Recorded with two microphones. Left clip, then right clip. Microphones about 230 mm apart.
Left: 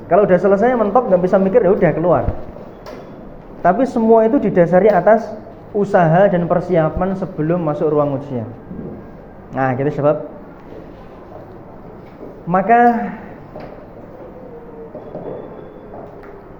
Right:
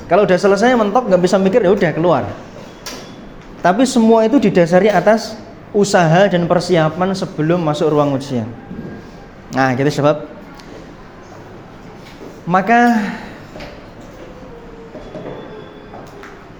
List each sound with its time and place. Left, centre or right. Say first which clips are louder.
0.1 s speech: even; right
3.6 s speech: right 1 dB; right
3.9 s speech: left 2 dB; right
4.4 s speech: even; right
9.5 s speech: right 3 dB; right
12.5 s speech: even; right